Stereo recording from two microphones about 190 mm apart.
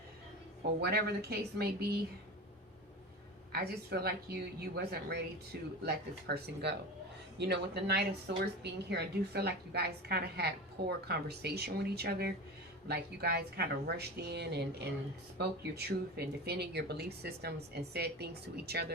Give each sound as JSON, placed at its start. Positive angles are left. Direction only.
{"t": 0.8, "sound": "a woman's voice", "side_deg": -60}
{"t": 3.5, "sound": "a woman's voice", "side_deg": -55}